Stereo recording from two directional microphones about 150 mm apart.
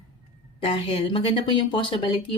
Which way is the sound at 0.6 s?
35° left (ahead or behind).